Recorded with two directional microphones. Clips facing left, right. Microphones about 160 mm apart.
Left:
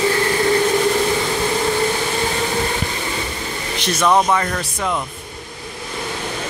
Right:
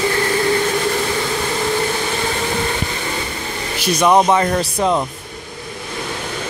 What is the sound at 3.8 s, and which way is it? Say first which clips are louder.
Speech: right 3 dB; 15° right (ahead or behind).